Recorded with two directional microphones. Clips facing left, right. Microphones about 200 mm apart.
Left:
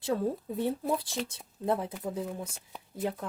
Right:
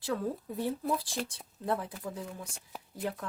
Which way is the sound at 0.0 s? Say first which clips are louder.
Left 3 dB; 25° left (ahead or behind).